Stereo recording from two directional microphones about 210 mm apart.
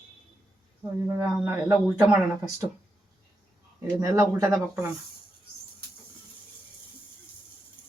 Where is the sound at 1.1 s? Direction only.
10° right (ahead or behind).